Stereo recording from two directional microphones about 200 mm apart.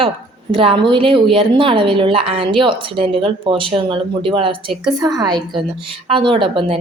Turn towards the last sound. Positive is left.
turn(degrees=-25)  # may be behind; listen again after turning